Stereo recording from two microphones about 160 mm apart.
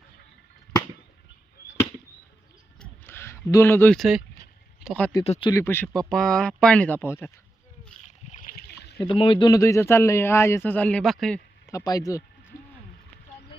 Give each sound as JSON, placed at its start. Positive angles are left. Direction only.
{"t": 2.8, "sound": "a sound", "side_deg": 15}
{"t": 3.9, "sound": "speech", "side_deg": 0}
{"t": 5.2, "sound": "speech", "side_deg": 40}
{"t": 5.5, "sound": "speech", "side_deg": 15}
{"t": 8.0, "sound": "splash", "side_deg": 50}
{"t": 8.5, "sound": "a sound", "side_deg": 90}
{"t": 9.0, "sound": "speech", "side_deg": 35}
{"t": 11.7, "sound": "speech", "side_deg": 25}